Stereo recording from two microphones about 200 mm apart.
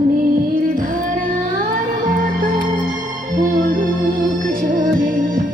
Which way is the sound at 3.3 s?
40° right (ahead or behind).